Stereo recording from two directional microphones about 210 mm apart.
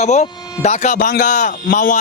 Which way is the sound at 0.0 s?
35° left (ahead or behind).